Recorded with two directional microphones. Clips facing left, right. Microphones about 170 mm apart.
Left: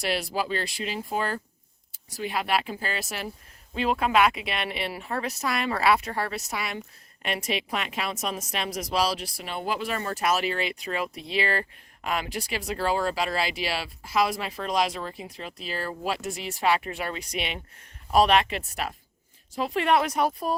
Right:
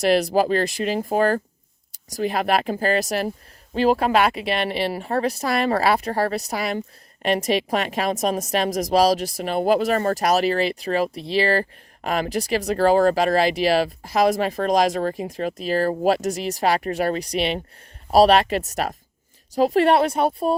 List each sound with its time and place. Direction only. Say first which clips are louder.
0.0 s speech: right 10 dB; 45° right (ahead or behind); by 20.6 s 30° right (ahead or behind)